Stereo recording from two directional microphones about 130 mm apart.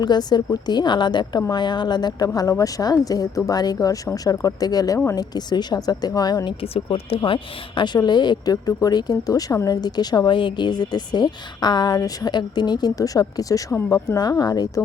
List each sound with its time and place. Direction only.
0.0 s a woman's voice: 30° left (ahead or behind)
6.6 s a woman's voice: 50° left (ahead or behind); by 14.8 s 30° left (ahead or behind)